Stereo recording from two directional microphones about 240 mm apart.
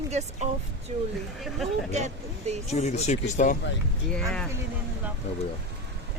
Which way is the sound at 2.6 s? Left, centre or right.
Left.